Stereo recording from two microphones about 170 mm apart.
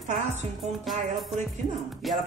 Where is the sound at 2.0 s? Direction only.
Centre (ahead or behind).